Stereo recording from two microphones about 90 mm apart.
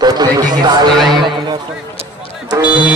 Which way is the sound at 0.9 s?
Centre (ahead or behind).